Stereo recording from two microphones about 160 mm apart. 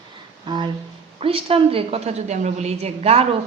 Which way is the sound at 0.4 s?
30° right (ahead or behind).